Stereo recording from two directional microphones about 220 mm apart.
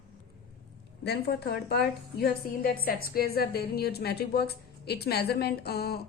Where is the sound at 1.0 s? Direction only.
45° left (ahead or behind).